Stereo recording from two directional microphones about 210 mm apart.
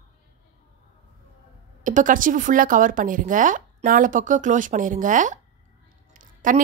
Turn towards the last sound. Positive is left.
turn(degrees=-40)  # may be behind; listen again after turning